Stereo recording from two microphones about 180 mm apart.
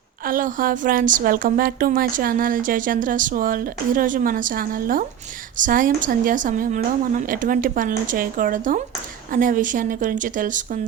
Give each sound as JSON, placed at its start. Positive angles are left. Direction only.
{"t": 0.3, "sound": "a woman's voice", "side_deg": -50}